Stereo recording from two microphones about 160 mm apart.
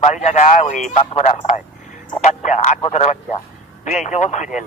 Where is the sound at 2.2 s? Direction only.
50° left (ahead or behind).